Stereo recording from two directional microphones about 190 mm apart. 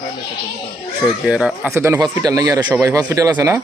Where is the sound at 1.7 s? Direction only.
15° right (ahead or behind).